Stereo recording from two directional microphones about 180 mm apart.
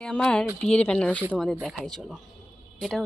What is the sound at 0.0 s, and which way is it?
Speech, 5° left (ahead or behind).